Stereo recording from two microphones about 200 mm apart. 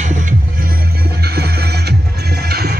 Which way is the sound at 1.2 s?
55° right (ahead or behind).